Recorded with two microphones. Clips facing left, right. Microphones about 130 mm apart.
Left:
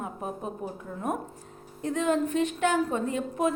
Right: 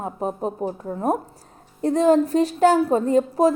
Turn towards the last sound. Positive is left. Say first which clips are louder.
# right 10 dB
turn(degrees=-35)  # may be behind; listen again after turning